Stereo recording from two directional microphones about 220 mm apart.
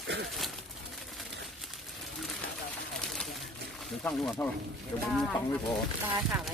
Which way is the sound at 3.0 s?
5° left (ahead or behind).